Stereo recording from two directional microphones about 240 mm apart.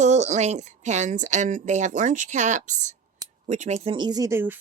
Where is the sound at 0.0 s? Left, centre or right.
Right.